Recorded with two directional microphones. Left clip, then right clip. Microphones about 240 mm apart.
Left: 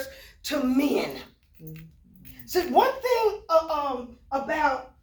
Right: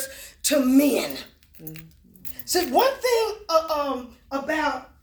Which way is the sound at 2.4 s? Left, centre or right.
Right.